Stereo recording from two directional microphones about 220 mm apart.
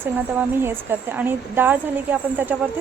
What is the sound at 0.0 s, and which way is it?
Speech, 10° right (ahead or behind).